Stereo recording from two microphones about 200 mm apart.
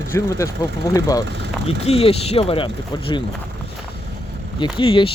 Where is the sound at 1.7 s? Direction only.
30° left (ahead or behind).